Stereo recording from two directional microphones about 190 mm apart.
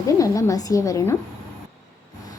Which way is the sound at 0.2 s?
15° left (ahead or behind).